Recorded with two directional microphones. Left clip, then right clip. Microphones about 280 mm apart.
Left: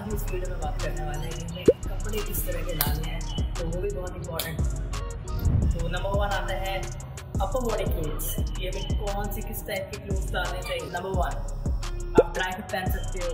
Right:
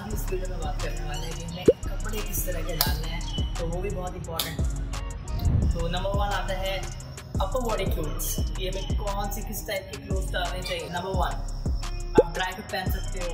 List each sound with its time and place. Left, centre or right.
0.3 s music: centre